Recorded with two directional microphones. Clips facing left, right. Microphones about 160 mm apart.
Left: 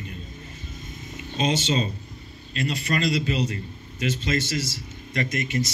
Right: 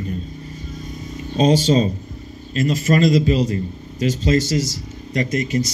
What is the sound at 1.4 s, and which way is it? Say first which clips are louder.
A man's voice: right 9 dB; 35° right (ahead or behind).